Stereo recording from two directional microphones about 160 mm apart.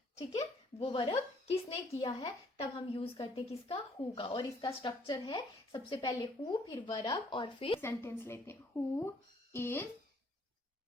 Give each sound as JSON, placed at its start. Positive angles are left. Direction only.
{"t": 0.8, "sound": "a woman's voice", "side_deg": 35}
{"t": 7.8, "sound": "speech", "side_deg": 15}